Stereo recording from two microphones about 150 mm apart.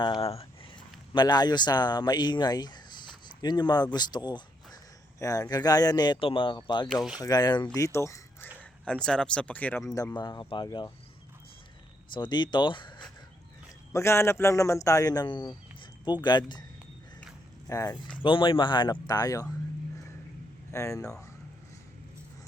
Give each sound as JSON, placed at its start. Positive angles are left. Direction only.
{"t": 0.2, "sound": "a sound", "side_deg": 40}
{"t": 1.1, "sound": "speech", "side_deg": 25}
{"t": 6.8, "sound": "speech", "side_deg": 0}
{"t": 7.2, "sound": "speech", "side_deg": 25}
{"t": 8.8, "sound": "speech", "side_deg": 5}
{"t": 9.8, "sound": "speech", "side_deg": 20}
{"t": 12.1, "sound": "speech", "side_deg": 30}
{"t": 13.9, "sound": "speech", "side_deg": 15}
{"t": 17.7, "sound": "speech", "side_deg": 25}
{"t": 18.2, "sound": "speech", "side_deg": 35}
{"t": 20.7, "sound": "speech", "side_deg": 20}